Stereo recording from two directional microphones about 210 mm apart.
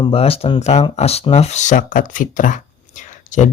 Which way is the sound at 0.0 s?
25° left (ahead or behind).